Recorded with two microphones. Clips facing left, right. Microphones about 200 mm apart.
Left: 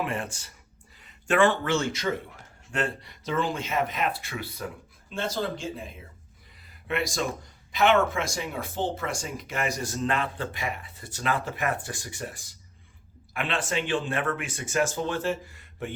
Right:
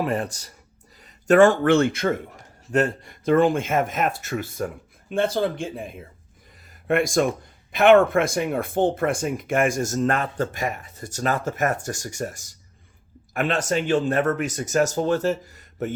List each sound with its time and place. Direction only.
0.0 s speech: 40° right (ahead or behind); by 2.1 s 55° right (ahead or behind)
2.3 s speech: 40° right (ahead or behind)